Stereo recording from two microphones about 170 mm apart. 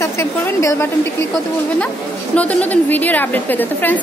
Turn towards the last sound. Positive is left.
turn(degrees=10)  # may be behind; listen again after turning